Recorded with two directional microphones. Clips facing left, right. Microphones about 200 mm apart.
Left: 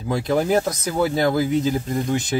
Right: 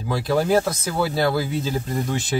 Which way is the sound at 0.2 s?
20° left (ahead or behind).